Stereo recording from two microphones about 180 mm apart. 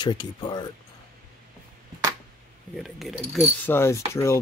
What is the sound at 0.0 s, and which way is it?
Speech, 25° left (ahead or behind).